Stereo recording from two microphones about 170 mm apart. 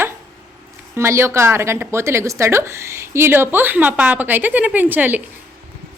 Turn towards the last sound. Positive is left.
turn(degrees=-10)  # may be behind; listen again after turning